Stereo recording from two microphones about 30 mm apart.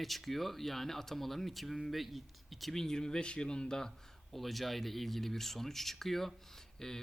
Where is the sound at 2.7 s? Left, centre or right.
Centre.